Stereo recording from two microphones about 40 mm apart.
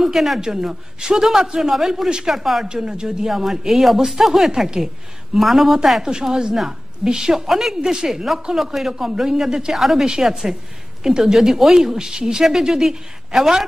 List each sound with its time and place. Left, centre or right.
0.0 s a man's voice: centre
0.4 s a man's voice: centre
2.3 s speech: centre
2.6 s speech: centre
3.3 s a man's voice: centre
5.4 s speech: centre
6.0 s a man's voice: centre
9.8 s a man's voice: centre